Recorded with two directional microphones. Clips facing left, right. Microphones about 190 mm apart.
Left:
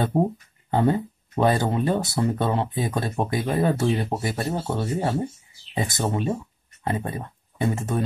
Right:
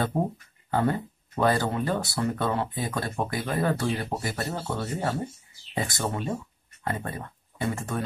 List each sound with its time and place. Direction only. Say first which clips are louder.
0.1 s speech: left 5 dB; 25° left (ahead or behind)